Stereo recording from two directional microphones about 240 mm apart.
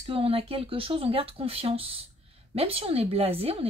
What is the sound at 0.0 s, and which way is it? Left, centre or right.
Speech, right.